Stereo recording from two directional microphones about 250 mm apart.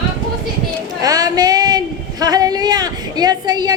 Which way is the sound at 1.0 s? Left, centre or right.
Centre.